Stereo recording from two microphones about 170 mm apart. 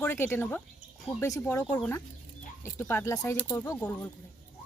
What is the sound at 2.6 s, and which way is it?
Speech, 15° left (ahead or behind).